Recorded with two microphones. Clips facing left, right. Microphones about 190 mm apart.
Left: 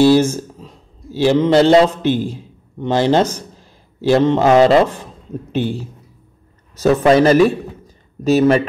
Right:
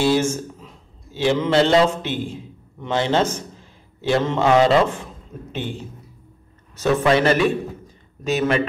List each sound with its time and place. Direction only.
0.0 s a man's voice: 35° left (ahead or behind)
6.8 s a man's voice: 40° left (ahead or behind)